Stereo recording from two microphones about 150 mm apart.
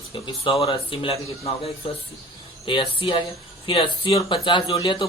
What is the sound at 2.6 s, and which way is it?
Speech, 35° left (ahead or behind).